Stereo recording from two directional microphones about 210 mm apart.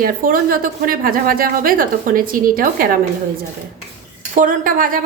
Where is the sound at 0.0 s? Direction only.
40° right (ahead or behind).